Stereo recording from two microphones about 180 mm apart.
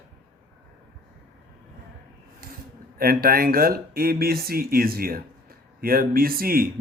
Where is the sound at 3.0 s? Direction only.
55° right (ahead or behind).